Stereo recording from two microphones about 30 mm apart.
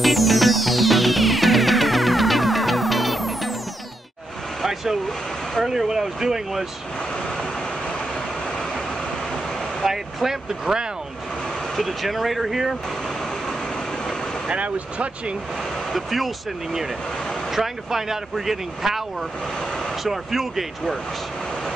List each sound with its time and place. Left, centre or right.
0.0 s music: centre
5.7 s speech: centre
9.8 s speech: centre
11.7 s speech: centre
14.5 s speech: right
15.9 s speech: centre
17.6 s speech: centre